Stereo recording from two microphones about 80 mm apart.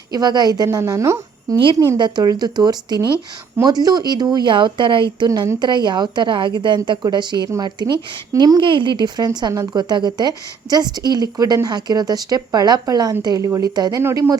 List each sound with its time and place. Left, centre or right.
0.1 s a woman's voice: right
0.8 s a woman's voice: right
2.0 s a woman's voice: right
2.2 s a woman's voice: right
7.4 s speech: right
8.6 s a woman's voice: right
11.7 s a woman's voice: right